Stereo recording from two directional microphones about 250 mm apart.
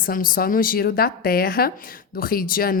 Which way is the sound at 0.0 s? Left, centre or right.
Left.